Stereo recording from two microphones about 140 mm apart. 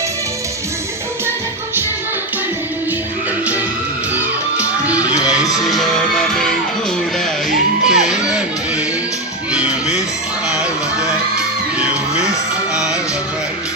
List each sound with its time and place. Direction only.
5.4 s music: 25° left (ahead or behind)
5.6 s music: centre (ahead or behind)
7.9 s music: 5° right (ahead or behind)
9.5 s music: 5° right (ahead or behind)
12.7 s music: 5° right (ahead or behind)